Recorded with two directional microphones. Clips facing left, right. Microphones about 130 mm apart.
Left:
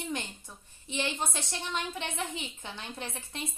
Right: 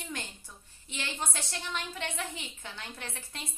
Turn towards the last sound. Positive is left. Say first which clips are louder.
# left 4 dB
turn(degrees=20)  # may be behind; listen again after turning